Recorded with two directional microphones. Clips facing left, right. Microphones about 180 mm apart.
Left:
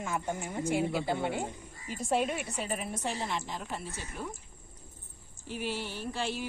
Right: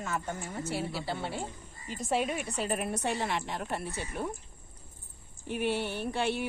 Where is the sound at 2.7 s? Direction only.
60° right (ahead or behind).